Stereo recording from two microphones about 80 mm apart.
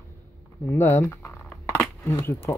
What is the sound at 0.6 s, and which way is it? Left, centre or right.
Speech, left.